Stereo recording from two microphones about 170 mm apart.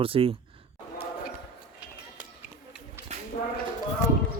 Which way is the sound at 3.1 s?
40° right (ahead or behind).